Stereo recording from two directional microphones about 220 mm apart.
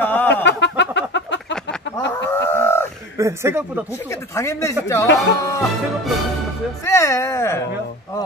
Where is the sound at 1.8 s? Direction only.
55° left (ahead or behind).